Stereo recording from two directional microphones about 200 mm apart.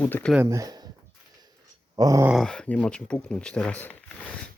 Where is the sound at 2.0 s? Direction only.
15° right (ahead or behind).